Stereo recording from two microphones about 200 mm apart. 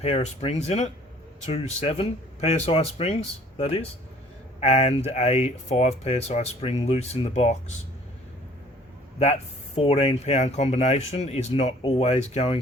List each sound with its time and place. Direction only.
0.0 s speech: 30° left (ahead or behind)
9.1 s speech: 30° left (ahead or behind)